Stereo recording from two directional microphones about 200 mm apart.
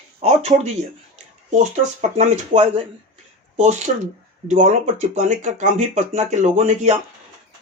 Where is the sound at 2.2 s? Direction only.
35° right (ahead or behind).